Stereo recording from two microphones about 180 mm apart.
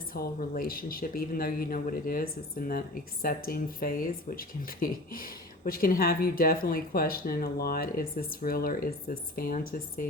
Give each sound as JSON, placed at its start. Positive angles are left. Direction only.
{"t": 0.1, "sound": "speech", "side_deg": 55}